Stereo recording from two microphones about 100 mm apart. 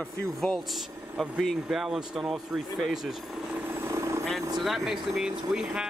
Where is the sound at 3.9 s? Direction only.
30° right (ahead or behind).